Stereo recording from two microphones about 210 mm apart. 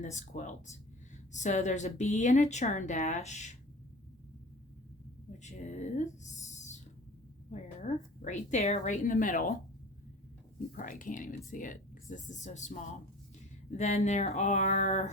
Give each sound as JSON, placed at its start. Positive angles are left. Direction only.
{"t": 0.0, "sound": "speech", "side_deg": 35}
{"t": 5.4, "sound": "speech", "side_deg": 35}
{"t": 10.8, "sound": "speech", "side_deg": 40}